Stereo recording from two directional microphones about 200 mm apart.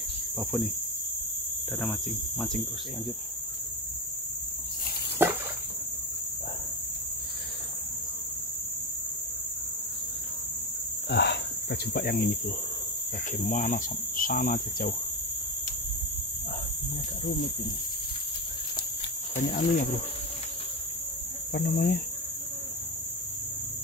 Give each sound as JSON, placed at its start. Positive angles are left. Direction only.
{"t": 0.4, "sound": "cricket", "side_deg": 0}
{"t": 1.8, "sound": "cricket", "side_deg": 0}
{"t": 5.2, "sound": "a sound", "side_deg": -10}
{"t": 11.1, "sound": "cricket", "side_deg": 55}
{"t": 19.3, "sound": "cricket", "side_deg": 45}
{"t": 21.5, "sound": "cricket", "side_deg": 50}